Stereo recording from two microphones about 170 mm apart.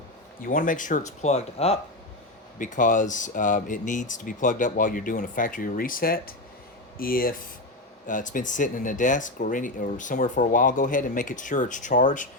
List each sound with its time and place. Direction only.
0.4 s speech: 50° left (ahead or behind); by 1.8 s 35° left (ahead or behind)
2.6 s speech: 50° left (ahead or behind)